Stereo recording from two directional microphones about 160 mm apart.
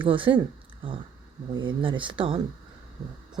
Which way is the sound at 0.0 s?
30° right (ahead or behind).